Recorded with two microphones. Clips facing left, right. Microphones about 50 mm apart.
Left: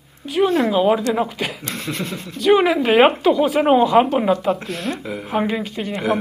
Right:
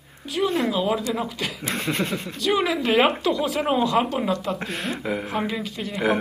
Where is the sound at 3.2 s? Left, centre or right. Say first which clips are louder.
Left 7 dB; centre.